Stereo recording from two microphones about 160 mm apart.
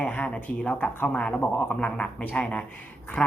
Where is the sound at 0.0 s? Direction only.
10° left (ahead or behind).